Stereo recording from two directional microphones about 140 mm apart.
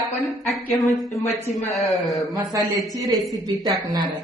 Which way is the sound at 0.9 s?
Centre (ahead or behind).